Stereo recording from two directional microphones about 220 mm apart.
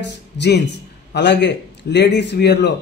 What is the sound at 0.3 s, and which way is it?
A man's voice, 50° left (ahead or behind).